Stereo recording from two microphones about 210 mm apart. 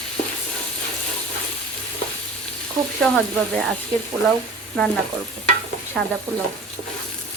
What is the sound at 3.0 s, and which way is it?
Frying, centre (ahead or behind).